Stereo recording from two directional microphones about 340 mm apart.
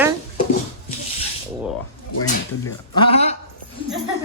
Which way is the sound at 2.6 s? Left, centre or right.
Centre.